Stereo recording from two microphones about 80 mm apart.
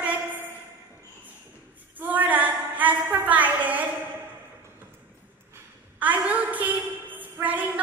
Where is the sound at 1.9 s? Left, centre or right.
Right.